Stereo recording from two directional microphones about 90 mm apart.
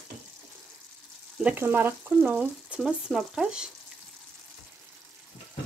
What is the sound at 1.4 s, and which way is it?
Speech, 20° right (ahead or behind).